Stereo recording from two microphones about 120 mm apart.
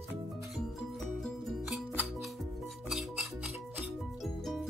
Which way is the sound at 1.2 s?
5° right (ahead or behind).